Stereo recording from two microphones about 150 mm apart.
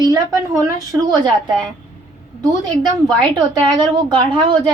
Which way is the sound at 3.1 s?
30° right (ahead or behind).